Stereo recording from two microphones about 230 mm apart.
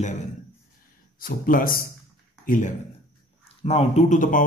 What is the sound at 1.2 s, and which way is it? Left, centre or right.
Speech, left.